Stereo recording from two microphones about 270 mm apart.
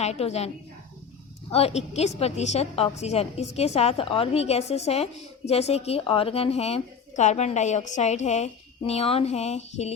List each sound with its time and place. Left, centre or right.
0.0 s a woman's voice: left